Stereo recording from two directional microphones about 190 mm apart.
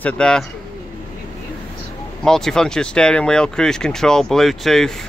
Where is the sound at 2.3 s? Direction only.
5° left (ahead or behind).